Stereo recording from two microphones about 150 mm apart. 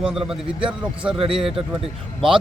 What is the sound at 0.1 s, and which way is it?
Speech, 5° right (ahead or behind).